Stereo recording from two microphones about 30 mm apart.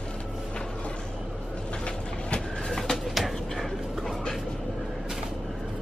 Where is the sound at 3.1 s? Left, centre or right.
Centre.